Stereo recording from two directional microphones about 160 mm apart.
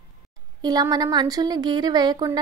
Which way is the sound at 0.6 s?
25° right (ahead or behind).